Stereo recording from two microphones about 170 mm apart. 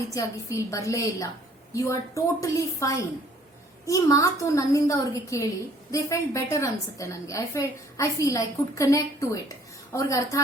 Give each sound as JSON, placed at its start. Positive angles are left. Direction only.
{"t": 0.1, "sound": "a woman's voice", "side_deg": 20}